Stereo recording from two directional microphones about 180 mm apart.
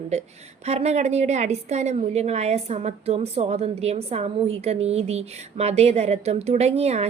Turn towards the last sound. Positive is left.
turn(degrees=-35)  # may be behind; listen again after turning